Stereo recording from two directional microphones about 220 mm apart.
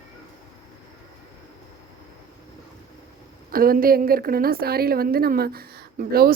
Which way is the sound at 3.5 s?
40° right (ahead or behind).